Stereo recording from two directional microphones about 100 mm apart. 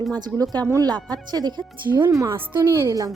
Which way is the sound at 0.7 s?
40° right (ahead or behind).